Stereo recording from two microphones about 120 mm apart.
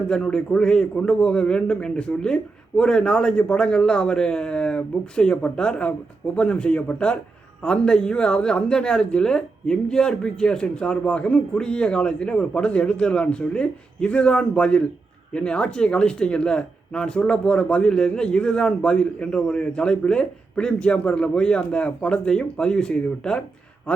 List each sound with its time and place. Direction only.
0.1 s speech: 5° left (ahead or behind)